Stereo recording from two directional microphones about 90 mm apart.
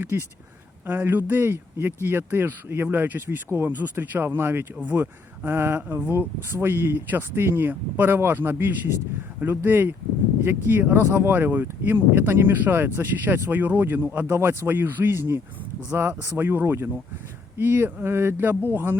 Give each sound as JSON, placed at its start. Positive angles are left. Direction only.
{"t": 0.0, "sound": "speech", "side_deg": -25}